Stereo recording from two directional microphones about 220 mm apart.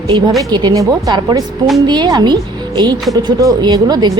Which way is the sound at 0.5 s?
15° right (ahead or behind).